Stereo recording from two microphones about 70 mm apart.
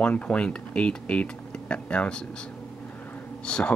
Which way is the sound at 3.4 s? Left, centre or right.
Centre.